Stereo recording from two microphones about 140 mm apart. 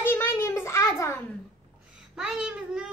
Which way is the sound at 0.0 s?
15° left (ahead or behind).